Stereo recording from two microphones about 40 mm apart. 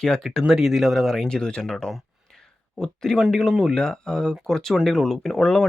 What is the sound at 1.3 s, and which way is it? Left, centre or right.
Speech, left.